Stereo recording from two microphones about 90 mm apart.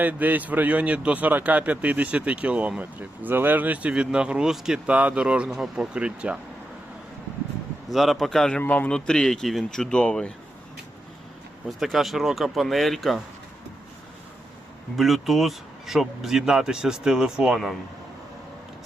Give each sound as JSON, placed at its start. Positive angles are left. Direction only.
{"t": 0.0, "sound": "a man's voice", "side_deg": -20}
{"t": 7.9, "sound": "speech", "side_deg": 0}
{"t": 11.8, "sound": "speech", "side_deg": 0}
{"t": 14.9, "sound": "speech", "side_deg": 0}